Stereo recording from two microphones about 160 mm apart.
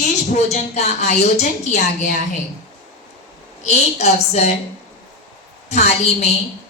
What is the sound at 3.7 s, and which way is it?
Speech, 45° left (ahead or behind).